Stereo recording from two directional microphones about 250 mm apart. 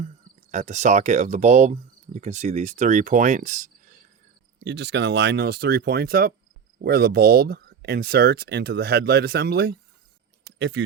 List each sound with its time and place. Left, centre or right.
0.5 s speech: right
4.6 s speech: right
10.4 s a sound: right